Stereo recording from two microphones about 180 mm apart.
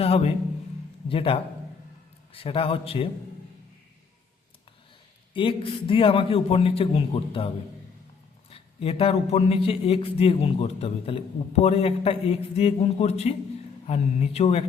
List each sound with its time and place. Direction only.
0.0 s a man's voice: 35° left (ahead or behind)
5.3 s a man's voice: 30° left (ahead or behind)